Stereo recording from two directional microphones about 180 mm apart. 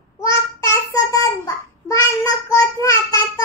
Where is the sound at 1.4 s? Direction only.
20° left (ahead or behind).